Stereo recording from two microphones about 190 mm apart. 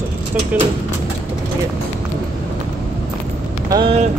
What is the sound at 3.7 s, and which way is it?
Speech, 30° right (ahead or behind).